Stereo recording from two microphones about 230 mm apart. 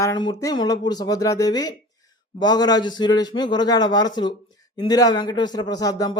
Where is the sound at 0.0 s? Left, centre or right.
Centre.